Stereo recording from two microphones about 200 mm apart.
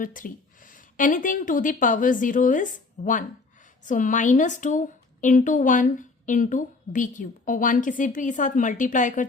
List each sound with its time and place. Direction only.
0.0 s a woman's voice: 45° left (ahead or behind)